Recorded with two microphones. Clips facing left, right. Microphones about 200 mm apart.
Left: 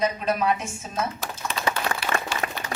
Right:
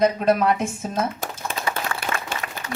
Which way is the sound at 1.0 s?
50° right (ahead or behind).